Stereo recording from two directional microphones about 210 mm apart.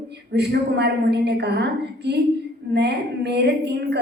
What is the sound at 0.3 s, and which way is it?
A woman's voice, 55° right (ahead or behind).